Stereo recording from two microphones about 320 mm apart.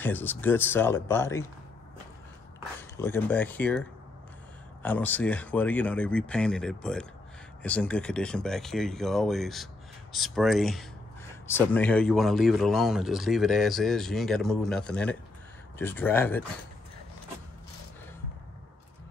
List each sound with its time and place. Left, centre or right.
0.0 s speech: centre
3.0 s speech: centre
4.8 s speech: centre